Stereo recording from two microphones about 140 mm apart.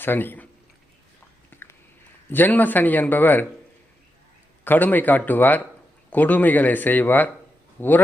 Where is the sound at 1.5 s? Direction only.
15° left (ahead or behind).